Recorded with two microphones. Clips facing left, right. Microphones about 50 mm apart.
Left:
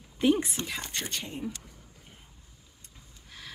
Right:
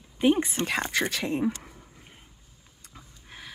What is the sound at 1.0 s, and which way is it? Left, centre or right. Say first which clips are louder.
Speech: right 9 dB; right.